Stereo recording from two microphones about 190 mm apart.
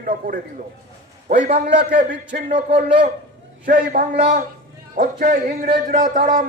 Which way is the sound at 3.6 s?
45° right (ahead or behind).